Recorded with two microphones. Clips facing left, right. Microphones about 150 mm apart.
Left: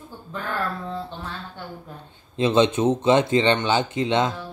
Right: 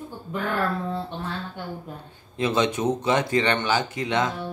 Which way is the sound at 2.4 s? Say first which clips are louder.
Left 4 dB; 25° left (ahead or behind).